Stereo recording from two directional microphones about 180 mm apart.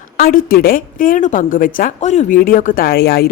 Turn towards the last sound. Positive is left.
turn(degrees=60)  # may be behind; listen again after turning